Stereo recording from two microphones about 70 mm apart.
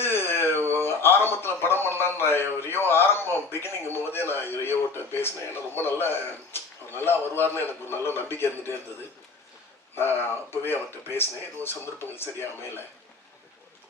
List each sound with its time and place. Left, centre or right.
0.0 s a man's voice: left
9.9 s a man's voice: left